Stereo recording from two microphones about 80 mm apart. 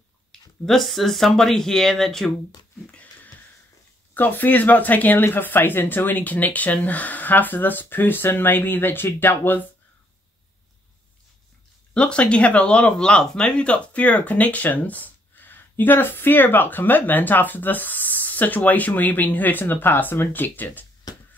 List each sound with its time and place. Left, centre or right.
0.3 s speech: centre
2.9 s wheeze: centre
4.1 s speech: left
11.9 s speech: centre